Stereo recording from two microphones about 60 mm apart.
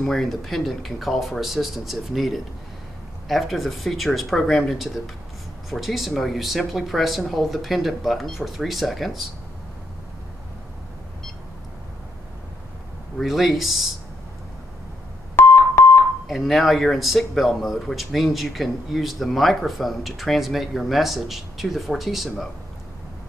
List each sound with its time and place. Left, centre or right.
0.0 s speech: centre
13.2 s speech: centre
15.4 s keyboard: left
16.3 s speech: centre